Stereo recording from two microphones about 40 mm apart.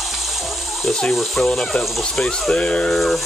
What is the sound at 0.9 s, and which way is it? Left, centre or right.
Speech, left.